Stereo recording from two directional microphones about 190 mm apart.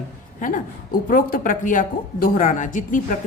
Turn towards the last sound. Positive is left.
turn(degrees=45)  # may be behind; listen again after turning